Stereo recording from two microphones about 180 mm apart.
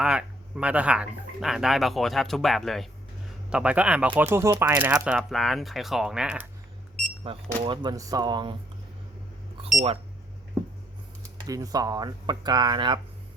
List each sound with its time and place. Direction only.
0.0 s speech: 5° right (ahead or behind)
7.3 s speech: 25° right (ahead or behind)
11.4 s speech: 20° right (ahead or behind)